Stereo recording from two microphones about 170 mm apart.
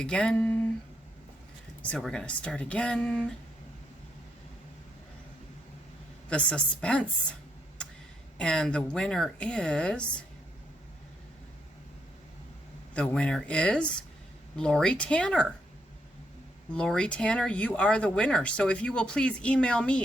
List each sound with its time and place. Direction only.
0.0 s a woman's voice: 5° left (ahead or behind)
2.0 s speech: 5° left (ahead or behind)
6.2 s a woman's voice: 5° left (ahead or behind)
8.4 s speech: 5° left (ahead or behind)
12.9 s speech: 5° left (ahead or behind)
16.7 s speech: 5° left (ahead or behind)